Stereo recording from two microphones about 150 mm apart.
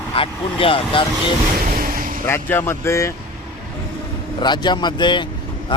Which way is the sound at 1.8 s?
65° right (ahead or behind).